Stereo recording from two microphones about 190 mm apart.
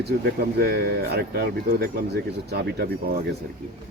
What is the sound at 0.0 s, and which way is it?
Speech, 55° right (ahead or behind).